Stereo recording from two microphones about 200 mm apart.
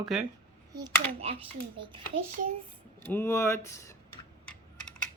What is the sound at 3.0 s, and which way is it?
Speech, 10° left (ahead or behind).